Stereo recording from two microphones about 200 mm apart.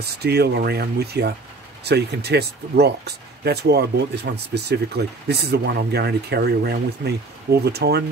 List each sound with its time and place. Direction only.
0.2 s speech: 55° right (ahead or behind)